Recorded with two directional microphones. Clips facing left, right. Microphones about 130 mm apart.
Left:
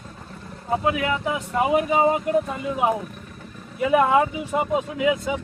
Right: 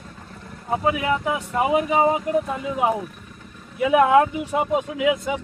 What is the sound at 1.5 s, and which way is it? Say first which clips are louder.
Speech: even; 15° right (ahead or behind).